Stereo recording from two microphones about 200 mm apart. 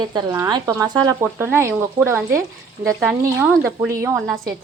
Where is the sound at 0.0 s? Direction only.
20° right (ahead or behind).